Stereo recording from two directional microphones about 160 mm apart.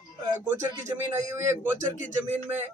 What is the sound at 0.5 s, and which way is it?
A man's voice, 20° right (ahead or behind).